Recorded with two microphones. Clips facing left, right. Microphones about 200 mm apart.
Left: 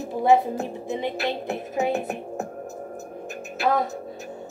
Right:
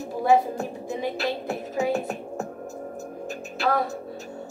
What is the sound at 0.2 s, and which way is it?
Speech, 20° left (ahead or behind).